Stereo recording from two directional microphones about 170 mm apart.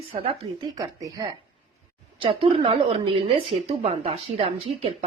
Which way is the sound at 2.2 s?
30° right (ahead or behind).